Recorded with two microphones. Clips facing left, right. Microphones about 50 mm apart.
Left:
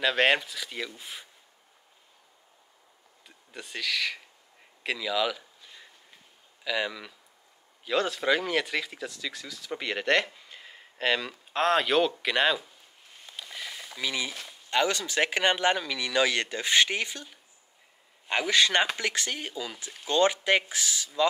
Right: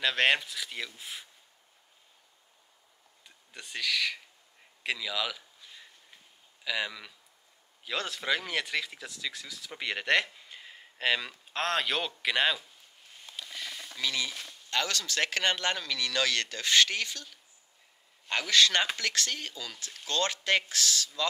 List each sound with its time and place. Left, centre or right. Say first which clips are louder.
0.0 s speech: left 3 dB; centre
3.3 s speech: left 3 dB; centre
4.8 s a sound: left 5 dB; centre
6.6 s speech: left 3 dB; centre
13.1 s a sound: left 1 dB; centre
14.7 s speech: left 5 dB; centre